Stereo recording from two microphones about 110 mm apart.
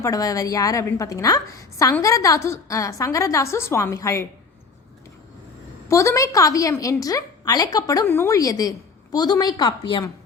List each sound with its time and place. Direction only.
0.0 s a woman's voice: 30° left (ahead or behind)
5.9 s a woman's voice: 25° left (ahead or behind)
8.0 s a woman's voice: 20° left (ahead or behind)
8.4 s a woman's voice: 35° left (ahead or behind)